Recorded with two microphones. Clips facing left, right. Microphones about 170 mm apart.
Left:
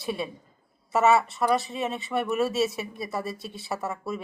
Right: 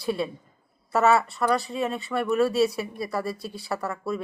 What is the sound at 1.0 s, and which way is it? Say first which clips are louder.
Speech: even; 20° left (ahead or behind).